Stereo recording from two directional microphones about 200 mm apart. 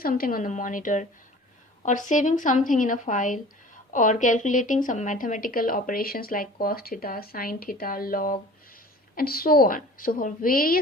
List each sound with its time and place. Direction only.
0.0 s a woman's voice: 45° left (ahead or behind)